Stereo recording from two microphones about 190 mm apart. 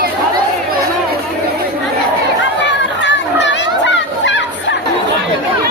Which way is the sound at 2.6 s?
70° left (ahead or behind).